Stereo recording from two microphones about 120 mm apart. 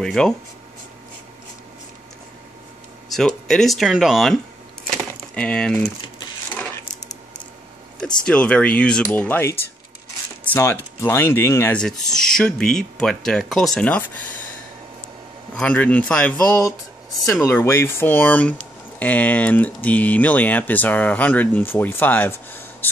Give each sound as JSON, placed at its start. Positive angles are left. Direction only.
{"t": 0.0, "sound": "speech", "side_deg": 5}
{"t": 3.1, "sound": "speech", "side_deg": 5}
{"t": 6.5, "sound": "a sound", "side_deg": 15}
{"t": 8.3, "sound": "speech", "side_deg": 10}
{"t": 12.0, "sound": "speech", "side_deg": 5}
{"t": 15.5, "sound": "speech", "side_deg": 10}
{"t": 16.5, "sound": "speech", "side_deg": 30}